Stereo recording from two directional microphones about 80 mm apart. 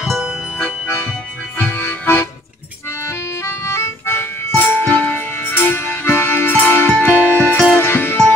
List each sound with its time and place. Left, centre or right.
1.6 s music: left
4.6 s music: centre